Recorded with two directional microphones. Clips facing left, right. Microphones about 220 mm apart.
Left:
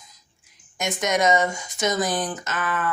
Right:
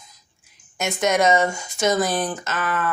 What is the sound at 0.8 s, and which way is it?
Speech, 15° left (ahead or behind).